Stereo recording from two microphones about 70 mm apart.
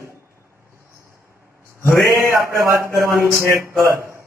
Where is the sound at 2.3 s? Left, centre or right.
Right.